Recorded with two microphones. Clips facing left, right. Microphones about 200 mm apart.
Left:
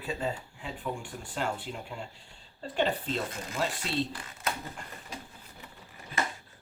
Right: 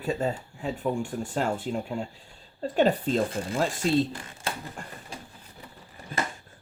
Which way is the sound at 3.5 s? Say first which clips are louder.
Right 7 dB; 45° right (ahead or behind).